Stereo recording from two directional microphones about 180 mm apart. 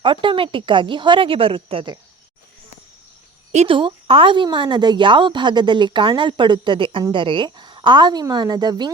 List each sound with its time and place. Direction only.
0.0 s a woman's voice: 30° right (ahead or behind)
3.5 s a woman's voice: 35° right (ahead or behind)